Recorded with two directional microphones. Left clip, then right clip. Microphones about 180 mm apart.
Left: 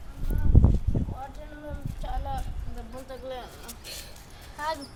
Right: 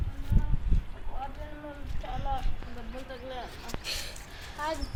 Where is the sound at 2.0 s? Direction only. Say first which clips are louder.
Left 2 dB; centre (ahead or behind).